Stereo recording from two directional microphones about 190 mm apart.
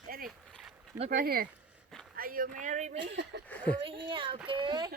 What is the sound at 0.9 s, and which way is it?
Speech, 35° right (ahead or behind).